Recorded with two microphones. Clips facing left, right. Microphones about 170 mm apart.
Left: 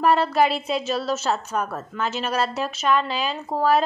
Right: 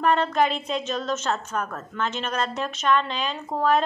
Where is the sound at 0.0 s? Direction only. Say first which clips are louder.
Left 2 dB; 5° left (ahead or behind).